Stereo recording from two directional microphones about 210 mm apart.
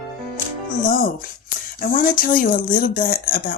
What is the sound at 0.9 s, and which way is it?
Speech, 40° left (ahead or behind).